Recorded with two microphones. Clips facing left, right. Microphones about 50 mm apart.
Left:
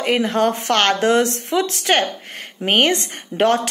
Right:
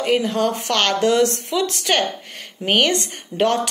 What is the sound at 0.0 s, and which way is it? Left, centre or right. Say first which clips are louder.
A woman's voice: left 1 dB; left.